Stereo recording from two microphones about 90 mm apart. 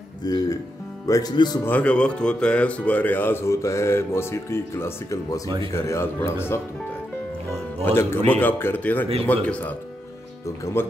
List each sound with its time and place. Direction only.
0.2 s speech: 50° left (ahead or behind)
1.3 s speech: 55° left (ahead or behind)
1.6 s speech: 20° left (ahead or behind)
7.8 s a man's voice: 25° left (ahead or behind)